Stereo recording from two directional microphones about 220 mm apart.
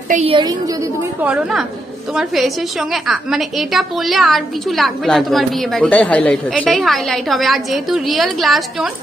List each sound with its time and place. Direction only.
0.1 s a woman's voice: 25° right (ahead or behind)
1.2 s a woman's voice: 5° right (ahead or behind)